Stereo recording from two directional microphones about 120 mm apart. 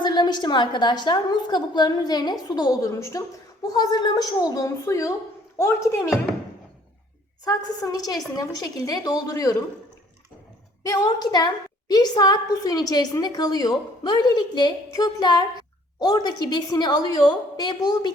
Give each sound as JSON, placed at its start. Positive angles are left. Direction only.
{"t": 0.0, "sound": "a woman's voice", "side_deg": 40}
{"t": 7.4, "sound": "a woman's voice", "side_deg": 30}
{"t": 10.8, "sound": "a woman's voice", "side_deg": 35}